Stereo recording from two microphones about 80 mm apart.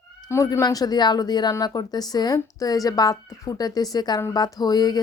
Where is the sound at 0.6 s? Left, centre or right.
Left.